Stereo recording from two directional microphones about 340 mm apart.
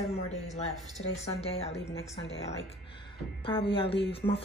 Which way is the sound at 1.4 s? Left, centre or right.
Centre.